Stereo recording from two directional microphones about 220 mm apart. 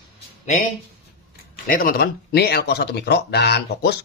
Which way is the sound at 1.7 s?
40° left (ahead or behind).